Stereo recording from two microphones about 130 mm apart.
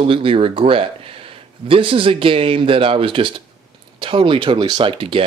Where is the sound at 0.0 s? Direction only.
45° right (ahead or behind).